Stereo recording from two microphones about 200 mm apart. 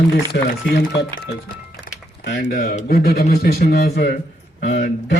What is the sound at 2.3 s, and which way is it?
A man's voice, 50° left (ahead or behind).